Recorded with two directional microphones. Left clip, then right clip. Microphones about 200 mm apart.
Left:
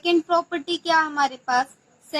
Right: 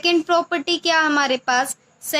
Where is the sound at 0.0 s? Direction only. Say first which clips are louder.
Right 3 dB; 35° right (ahead or behind).